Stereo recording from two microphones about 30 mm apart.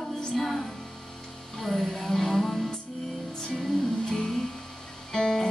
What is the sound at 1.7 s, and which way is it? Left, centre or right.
Music, centre.